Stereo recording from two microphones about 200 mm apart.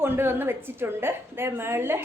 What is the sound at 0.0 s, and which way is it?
A woman's voice, 10° right (ahead or behind).